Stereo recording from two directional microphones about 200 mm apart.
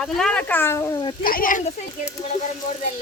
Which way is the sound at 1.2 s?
45° left (ahead or behind).